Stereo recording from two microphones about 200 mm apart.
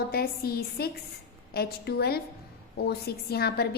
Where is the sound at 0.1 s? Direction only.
50° left (ahead or behind).